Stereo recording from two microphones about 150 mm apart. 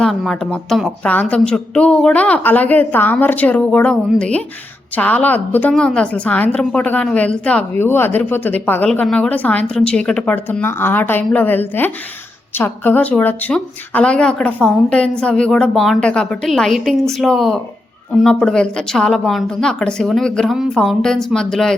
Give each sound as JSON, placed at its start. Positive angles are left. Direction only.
{"t": 0.0, "sound": "a woman's voice", "side_deg": 5}